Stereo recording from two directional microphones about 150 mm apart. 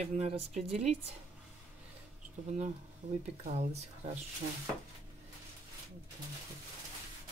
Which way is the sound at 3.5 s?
45° right (ahead or behind).